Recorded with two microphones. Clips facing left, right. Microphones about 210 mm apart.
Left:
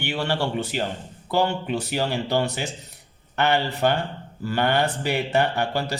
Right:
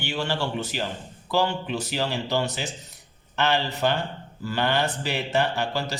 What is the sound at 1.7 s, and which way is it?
Speech, 55° left (ahead or behind).